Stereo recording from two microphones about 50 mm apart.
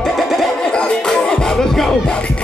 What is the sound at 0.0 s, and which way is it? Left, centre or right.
Music, centre.